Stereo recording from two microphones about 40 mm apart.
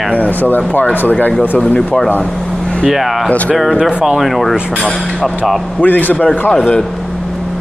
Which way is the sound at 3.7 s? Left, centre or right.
Centre.